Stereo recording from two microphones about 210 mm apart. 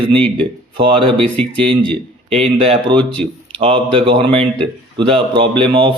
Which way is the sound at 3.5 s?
25° right (ahead or behind).